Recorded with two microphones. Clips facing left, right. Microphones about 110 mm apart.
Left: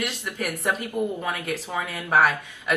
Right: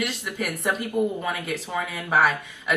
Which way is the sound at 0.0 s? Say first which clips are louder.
Right 1 dB; centre (ahead or behind).